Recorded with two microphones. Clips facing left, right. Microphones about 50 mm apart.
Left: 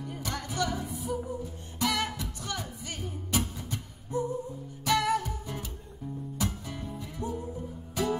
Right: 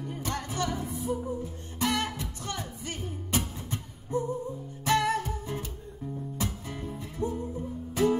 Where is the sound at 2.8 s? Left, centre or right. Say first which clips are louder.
Right 1 dB; right.